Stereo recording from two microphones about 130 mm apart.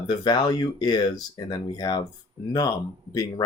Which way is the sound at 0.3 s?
35° left (ahead or behind).